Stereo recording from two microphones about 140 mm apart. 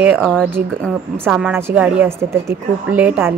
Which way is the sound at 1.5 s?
10° right (ahead or behind).